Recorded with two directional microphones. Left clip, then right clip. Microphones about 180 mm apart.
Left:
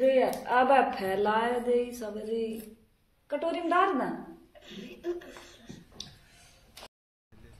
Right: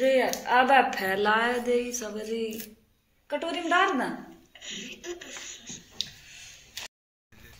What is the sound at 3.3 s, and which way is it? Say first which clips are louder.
Speech: right 2 dB; 10° right (ahead or behind).